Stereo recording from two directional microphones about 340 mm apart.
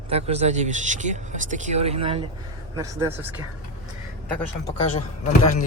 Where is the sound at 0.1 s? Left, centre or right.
Centre.